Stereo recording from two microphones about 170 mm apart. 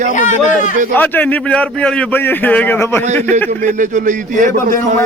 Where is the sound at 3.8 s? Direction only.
50° right (ahead or behind).